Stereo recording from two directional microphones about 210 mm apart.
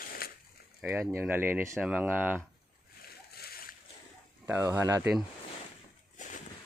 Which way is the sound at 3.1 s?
45° left (ahead or behind).